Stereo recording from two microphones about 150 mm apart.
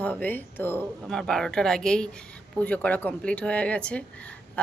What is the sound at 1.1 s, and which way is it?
Speech, 5° left (ahead or behind).